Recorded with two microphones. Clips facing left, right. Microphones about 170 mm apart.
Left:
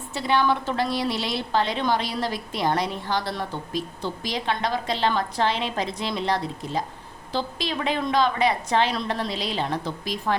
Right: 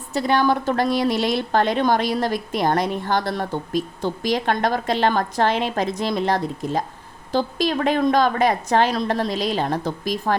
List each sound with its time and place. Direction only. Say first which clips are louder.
0.1 s a woman's voice: right 4 dB; 45° right (ahead or behind)